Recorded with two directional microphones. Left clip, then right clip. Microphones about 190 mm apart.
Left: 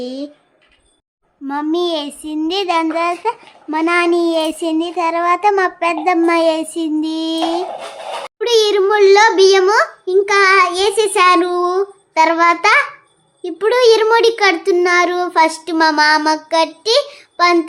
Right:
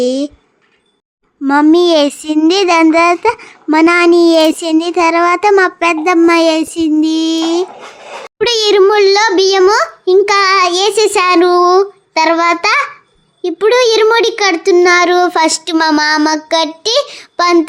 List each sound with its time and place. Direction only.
0.0 s a child's voice: 30° right (ahead or behind)
1.5 s a child's voice: 35° right (ahead or behind)